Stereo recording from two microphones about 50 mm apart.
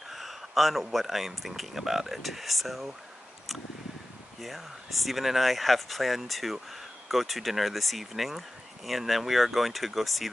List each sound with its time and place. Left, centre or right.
0.1 s a sound: centre
0.9 s speech: centre
4.4 s speech: centre